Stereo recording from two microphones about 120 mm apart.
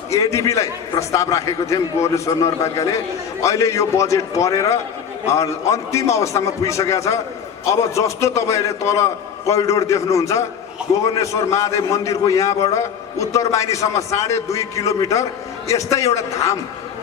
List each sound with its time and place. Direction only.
0.1 s a man's voice: 25° left (ahead or behind)